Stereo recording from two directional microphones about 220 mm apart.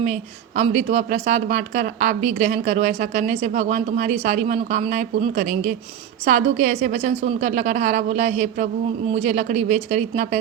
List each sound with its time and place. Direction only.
0.0 s a woman's voice: 30° right (ahead or behind)